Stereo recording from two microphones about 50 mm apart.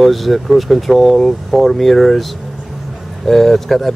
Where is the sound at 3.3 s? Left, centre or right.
Centre.